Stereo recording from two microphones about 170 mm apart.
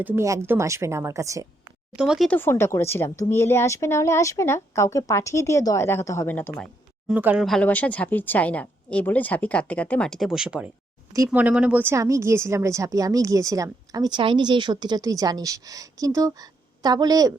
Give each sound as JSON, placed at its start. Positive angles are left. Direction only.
{"t": 0.0, "sound": "a woman's voice", "side_deg": -15}
{"t": 2.0, "sound": "speech", "side_deg": -5}
{"t": 2.3, "sound": "a woman's voice", "side_deg": 15}
{"t": 7.1, "sound": "a woman's voice", "side_deg": -10}